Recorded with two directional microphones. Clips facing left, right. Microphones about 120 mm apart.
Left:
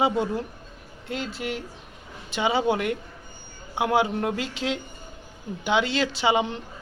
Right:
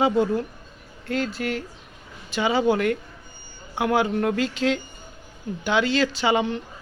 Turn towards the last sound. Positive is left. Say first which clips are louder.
# right 1 dB
turn(degrees=20)  # may be behind; listen again after turning